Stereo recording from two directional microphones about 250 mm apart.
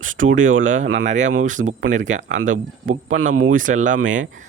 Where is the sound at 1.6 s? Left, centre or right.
Right.